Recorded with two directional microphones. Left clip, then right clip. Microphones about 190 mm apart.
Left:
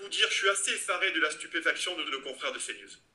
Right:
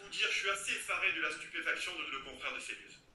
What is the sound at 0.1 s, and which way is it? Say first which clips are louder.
Speech: left 7 dB; 50° left (ahead or behind).